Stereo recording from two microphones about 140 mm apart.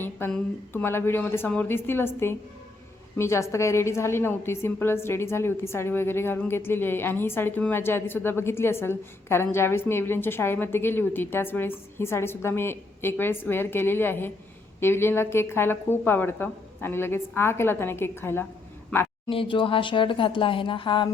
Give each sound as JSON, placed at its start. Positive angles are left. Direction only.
{"t": 0.0, "sound": "a woman's voice", "side_deg": 15}
{"t": 19.3, "sound": "speech", "side_deg": 40}